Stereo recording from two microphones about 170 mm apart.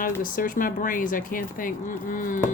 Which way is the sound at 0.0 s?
55° left (ahead or behind).